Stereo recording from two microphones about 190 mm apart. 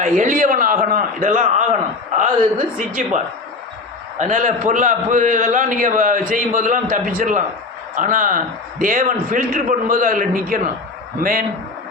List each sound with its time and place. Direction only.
0.0 s a man's voice: 45° right (ahead or behind)
3.0 s a man's voice: 40° right (ahead or behind)
4.2 s a man's voice: 45° right (ahead or behind)